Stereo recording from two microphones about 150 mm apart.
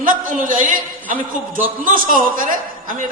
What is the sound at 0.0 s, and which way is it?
A man's voice, 65° right (ahead or behind).